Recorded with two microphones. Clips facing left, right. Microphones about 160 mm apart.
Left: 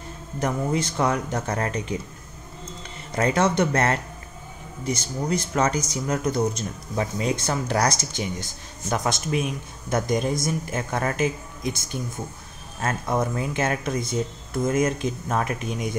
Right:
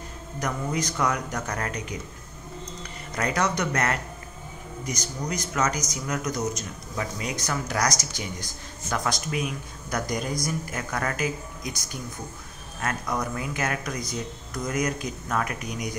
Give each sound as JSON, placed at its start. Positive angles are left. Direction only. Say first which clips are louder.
{"t": 0.4, "sound": "speech", "louder": "left 4 dB", "side_deg": 25}